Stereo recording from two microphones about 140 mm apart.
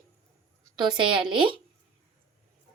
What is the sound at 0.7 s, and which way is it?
Speech, 35° right (ahead or behind).